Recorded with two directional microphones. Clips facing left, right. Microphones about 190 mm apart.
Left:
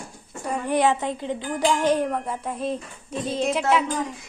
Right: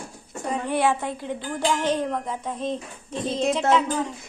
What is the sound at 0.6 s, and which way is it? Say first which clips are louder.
A woman's voice: left 2 dB; 15° left (ahead or behind).